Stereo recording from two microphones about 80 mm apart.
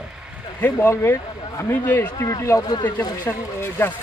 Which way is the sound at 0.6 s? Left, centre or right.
Left.